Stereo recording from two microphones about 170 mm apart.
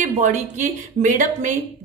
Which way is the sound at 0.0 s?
45° right (ahead or behind).